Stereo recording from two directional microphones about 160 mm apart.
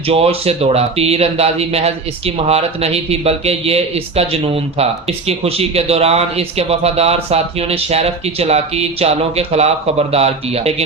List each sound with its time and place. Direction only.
0.1 s speech: 40° right (ahead or behind)